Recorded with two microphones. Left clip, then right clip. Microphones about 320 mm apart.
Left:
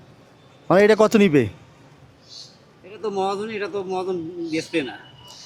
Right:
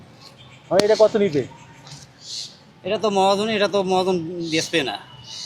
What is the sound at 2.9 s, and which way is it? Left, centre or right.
Speech, right.